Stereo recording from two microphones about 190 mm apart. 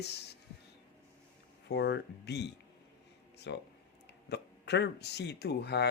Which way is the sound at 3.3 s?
65° left (ahead or behind).